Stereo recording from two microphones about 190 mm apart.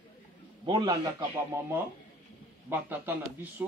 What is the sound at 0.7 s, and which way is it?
Speech, 20° right (ahead or behind).